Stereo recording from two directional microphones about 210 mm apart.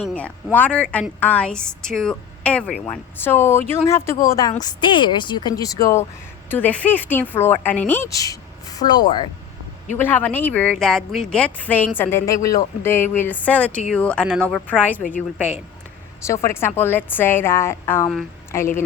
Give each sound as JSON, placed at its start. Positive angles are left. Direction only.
{"t": 0.0, "sound": "a woman's voice", "side_deg": 5}
{"t": 10.0, "sound": "a woman's voice", "side_deg": 10}
{"t": 16.2, "sound": "a woman's voice", "side_deg": 15}